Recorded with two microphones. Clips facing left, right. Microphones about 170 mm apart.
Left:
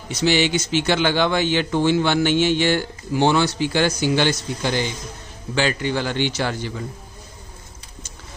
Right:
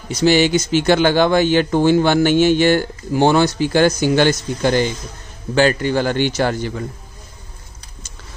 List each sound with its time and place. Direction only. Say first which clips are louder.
0.1 s speech: right 5 dB; 45° right (ahead or behind)